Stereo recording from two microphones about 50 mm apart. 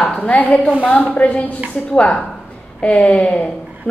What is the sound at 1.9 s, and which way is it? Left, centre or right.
A woman's voice, left.